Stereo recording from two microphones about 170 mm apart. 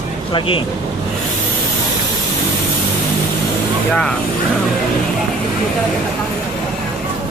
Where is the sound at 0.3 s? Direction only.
30° left (ahead or behind).